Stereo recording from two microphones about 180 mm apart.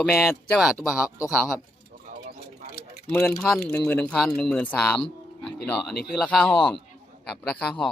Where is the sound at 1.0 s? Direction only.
20° left (ahead or behind).